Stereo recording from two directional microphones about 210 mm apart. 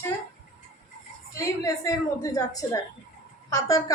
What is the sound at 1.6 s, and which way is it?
A woman's voice, 15° left (ahead or behind).